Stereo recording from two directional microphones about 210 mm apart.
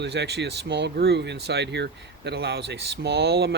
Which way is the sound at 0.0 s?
55° right (ahead or behind).